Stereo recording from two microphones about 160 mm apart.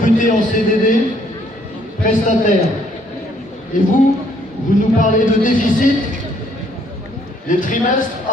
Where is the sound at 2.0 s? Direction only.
55° left (ahead or behind).